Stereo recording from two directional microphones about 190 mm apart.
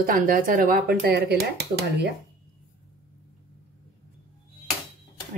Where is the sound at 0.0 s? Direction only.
50° right (ahead or behind).